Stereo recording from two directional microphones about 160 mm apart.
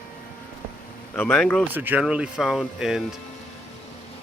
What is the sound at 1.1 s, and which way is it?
Speech, 10° left (ahead or behind).